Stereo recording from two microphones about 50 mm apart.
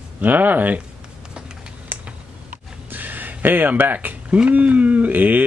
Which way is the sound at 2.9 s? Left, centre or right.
Right.